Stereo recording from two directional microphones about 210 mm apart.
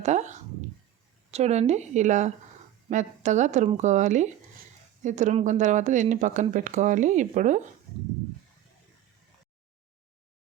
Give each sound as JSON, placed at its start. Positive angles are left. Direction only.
{"t": 0.0, "sound": "a woman's voice", "side_deg": -35}